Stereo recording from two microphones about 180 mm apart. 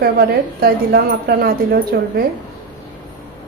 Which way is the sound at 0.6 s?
60° right (ahead or behind).